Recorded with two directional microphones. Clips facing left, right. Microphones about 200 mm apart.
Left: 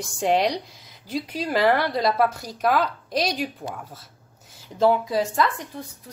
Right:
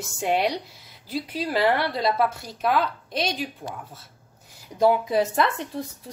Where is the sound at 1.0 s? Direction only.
5° right (ahead or behind).